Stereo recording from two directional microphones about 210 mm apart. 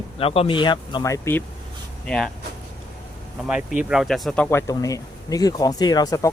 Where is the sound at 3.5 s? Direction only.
5° right (ahead or behind); by 6.3 s 15° left (ahead or behind).